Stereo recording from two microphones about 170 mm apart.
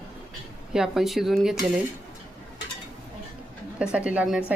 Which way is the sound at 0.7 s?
5° right (ahead or behind).